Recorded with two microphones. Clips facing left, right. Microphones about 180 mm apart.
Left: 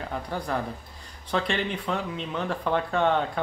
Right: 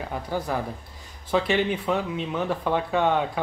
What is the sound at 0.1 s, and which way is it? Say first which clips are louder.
Speech: right 2 dB; 5° right (ahead or behind).